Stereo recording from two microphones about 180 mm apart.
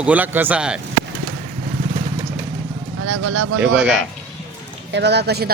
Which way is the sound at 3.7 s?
80° right.